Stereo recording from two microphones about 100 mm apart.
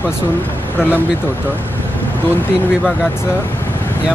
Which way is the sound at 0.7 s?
20° left (ahead or behind).